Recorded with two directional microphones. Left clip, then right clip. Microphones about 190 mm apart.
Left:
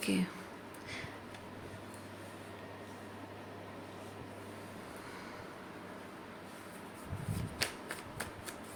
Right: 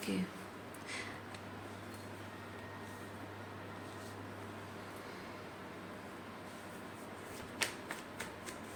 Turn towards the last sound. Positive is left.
turn(degrees=15)  # may be behind; listen again after turning